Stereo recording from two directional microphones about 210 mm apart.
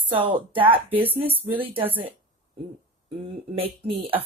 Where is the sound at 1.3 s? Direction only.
10° right (ahead or behind).